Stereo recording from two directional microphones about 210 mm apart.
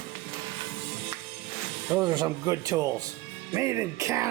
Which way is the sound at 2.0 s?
20° right (ahead or behind).